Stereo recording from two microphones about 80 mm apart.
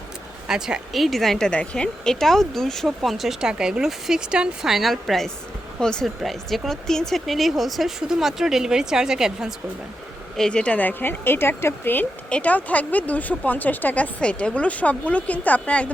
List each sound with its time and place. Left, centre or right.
0.4 s speech: centre
1.5 s speech: centre
10.3 s speech: centre